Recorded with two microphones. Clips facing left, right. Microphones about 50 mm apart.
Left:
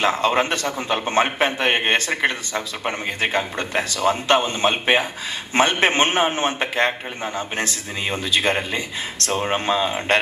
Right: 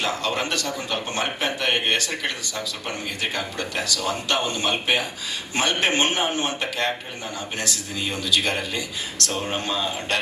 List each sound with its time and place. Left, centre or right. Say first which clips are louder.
0.0 s a man's voice: left 6 dB; left